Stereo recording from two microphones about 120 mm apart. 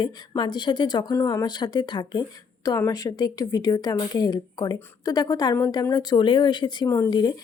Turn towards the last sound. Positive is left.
turn(degrees=35)  # may be behind; listen again after turning